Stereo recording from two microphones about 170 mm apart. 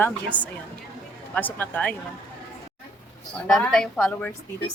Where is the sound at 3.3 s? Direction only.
5° left (ahead or behind).